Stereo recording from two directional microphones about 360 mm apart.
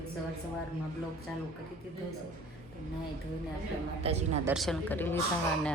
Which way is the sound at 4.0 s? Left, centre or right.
Centre.